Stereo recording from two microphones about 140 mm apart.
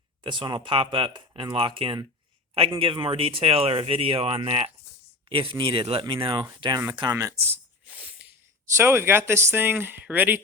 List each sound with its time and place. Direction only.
0.2 s speech: 35° right (ahead or behind)
7.2 s a sound: 20° right (ahead or behind)
8.7 s speech: 15° right (ahead or behind)